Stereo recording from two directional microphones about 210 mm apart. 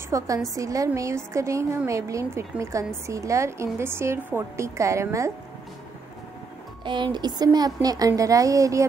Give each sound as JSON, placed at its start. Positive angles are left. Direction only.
{"t": 0.1, "sound": "a woman's voice", "side_deg": -15}
{"t": 6.8, "sound": "a woman's voice", "side_deg": -20}